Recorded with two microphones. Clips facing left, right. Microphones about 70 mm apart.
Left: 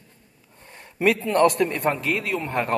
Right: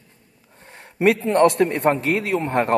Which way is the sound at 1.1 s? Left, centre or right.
Right.